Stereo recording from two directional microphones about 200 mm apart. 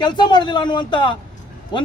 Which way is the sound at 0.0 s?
20° left (ahead or behind).